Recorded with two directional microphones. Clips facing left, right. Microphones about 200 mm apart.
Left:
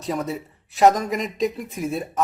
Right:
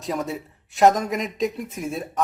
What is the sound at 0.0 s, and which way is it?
Speech, centre (ahead or behind).